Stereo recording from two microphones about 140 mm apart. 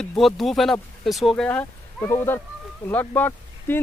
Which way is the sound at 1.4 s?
15° left (ahead or behind).